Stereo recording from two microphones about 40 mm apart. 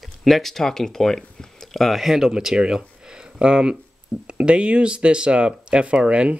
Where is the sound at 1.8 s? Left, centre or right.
Centre.